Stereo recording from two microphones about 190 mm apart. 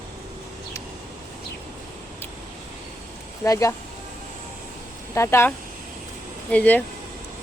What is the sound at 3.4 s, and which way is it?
Speech, 15° left (ahead or behind).